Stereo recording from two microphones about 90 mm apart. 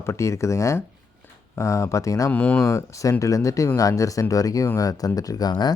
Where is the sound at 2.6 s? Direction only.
35° left (ahead or behind).